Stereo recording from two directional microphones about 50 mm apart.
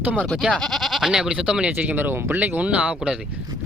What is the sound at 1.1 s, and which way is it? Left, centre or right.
Speech, centre.